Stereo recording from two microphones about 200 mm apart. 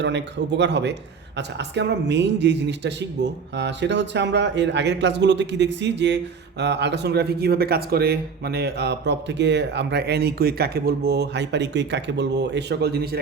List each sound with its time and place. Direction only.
0.0 s a man's voice: 60° right (ahead or behind)